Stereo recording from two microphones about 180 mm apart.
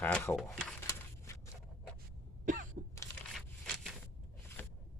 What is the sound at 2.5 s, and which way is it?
Cough, 45° right (ahead or behind).